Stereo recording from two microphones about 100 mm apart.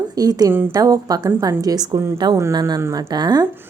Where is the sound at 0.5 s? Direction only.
20° right (ahead or behind).